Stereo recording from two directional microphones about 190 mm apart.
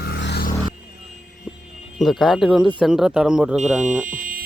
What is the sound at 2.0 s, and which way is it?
Speech, centre (ahead or behind).